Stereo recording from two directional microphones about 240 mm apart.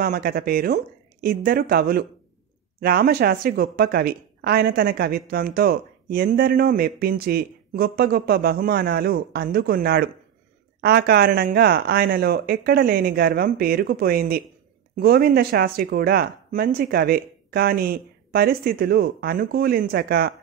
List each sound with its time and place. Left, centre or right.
0.0 s speech: right